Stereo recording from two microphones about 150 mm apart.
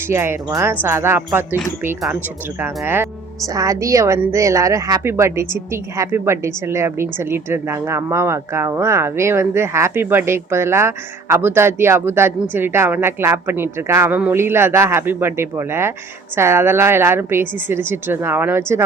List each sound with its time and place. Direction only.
0.1 s a woman's voice: 15° right (ahead or behind)
2.6 s a woman's voice: 15° right (ahead or behind)